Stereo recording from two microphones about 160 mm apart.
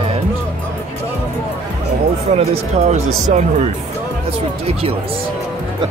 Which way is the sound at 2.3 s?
45° right (ahead or behind).